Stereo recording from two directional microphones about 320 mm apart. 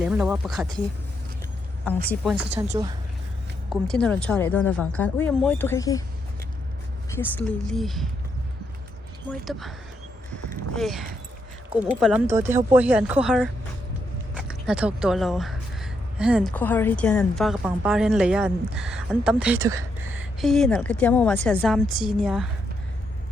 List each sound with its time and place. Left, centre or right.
0.0 s speech: centre
2.0 s a woman's voice: centre
3.7 s speech: centre
7.1 s speech: centre
9.3 s speech: centre
10.3 s a sound: centre
11.7 s speech: centre
19.6 s a sound: centre
20.4 s speech: centre